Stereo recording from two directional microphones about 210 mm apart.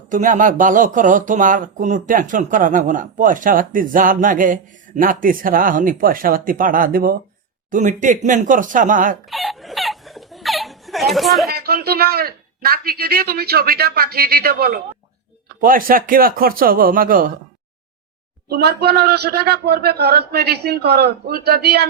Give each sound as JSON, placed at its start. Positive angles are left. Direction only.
{"t": 0.1, "sound": "speech", "side_deg": -40}
{"t": 9.3, "sound": "laughter", "side_deg": 0}
{"t": 11.4, "sound": "speech", "side_deg": -50}
{"t": 18.4, "sound": "speech", "side_deg": -45}